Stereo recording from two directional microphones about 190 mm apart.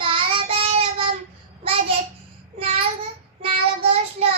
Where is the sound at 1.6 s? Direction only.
30° right (ahead or behind).